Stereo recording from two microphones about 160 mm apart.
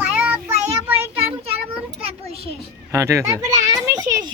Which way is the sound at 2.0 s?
40° right (ahead or behind).